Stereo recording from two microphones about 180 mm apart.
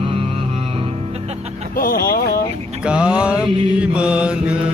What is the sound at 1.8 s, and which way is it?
Speech, 55° left (ahead or behind).